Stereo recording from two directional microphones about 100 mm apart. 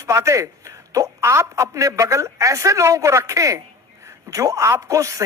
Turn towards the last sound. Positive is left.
turn(degrees=-30)  # may be behind; listen again after turning